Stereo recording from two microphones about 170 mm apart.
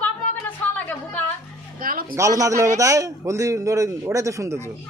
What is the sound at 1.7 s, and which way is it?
Speech, 55° right (ahead or behind).